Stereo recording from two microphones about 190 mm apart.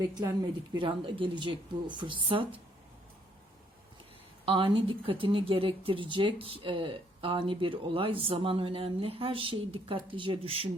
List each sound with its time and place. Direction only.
0.2 s speech: 20° right (ahead or behind)
4.4 s speech: 25° right (ahead or behind)